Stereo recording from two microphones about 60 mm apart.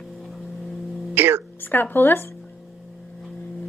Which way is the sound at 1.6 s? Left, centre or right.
Left.